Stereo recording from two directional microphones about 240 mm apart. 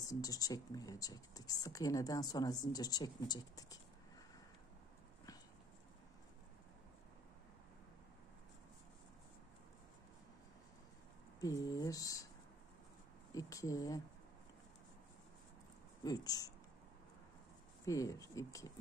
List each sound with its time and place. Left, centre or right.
0.0 s speech: centre
11.4 s speech: centre
13.3 s speech: centre
16.0 s speech: centre
17.8 s speech: centre